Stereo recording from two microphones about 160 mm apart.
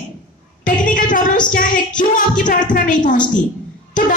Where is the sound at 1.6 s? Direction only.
55° left (ahead or behind).